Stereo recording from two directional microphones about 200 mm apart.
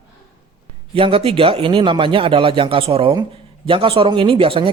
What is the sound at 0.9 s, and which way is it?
Speech, 25° right (ahead or behind).